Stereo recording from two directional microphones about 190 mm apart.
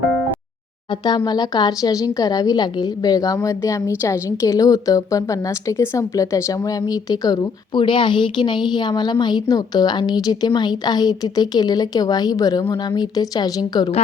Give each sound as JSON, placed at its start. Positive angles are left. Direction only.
{"t": 0.9, "sound": "speech", "side_deg": 20}